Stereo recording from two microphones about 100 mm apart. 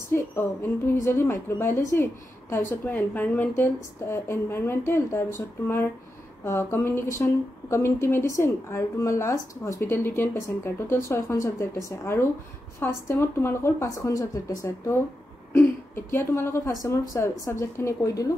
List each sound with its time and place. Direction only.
0.1 s a woman's voice: 25° left (ahead or behind)
2.5 s a woman's voice: 15° left (ahead or behind)
6.4 s a woman's voice: 25° left (ahead or behind)